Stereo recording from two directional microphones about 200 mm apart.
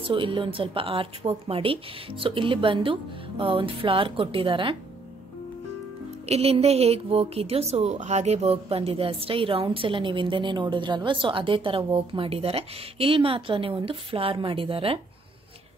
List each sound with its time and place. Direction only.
0.0 s a woman's voice: 25° right (ahead or behind)
6.2 s a woman's voice: 30° right (ahead or behind)